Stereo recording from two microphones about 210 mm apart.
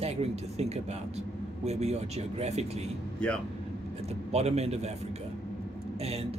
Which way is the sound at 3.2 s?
5° left (ahead or behind).